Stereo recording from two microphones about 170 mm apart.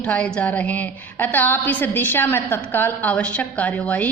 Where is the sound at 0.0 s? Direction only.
5° left (ahead or behind).